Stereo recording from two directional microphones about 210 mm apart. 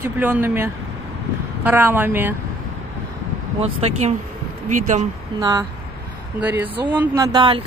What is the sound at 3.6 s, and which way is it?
Speech, 30° right (ahead or behind).